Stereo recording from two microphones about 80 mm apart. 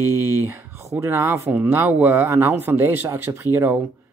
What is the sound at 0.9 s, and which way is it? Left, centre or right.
Speech, right.